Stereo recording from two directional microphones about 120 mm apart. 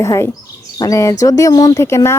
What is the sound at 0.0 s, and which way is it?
A woman's voice, 25° left (ahead or behind).